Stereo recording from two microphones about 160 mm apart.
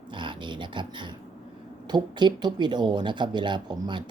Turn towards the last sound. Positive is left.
turn(degrees=-30)  # may be behind; listen again after turning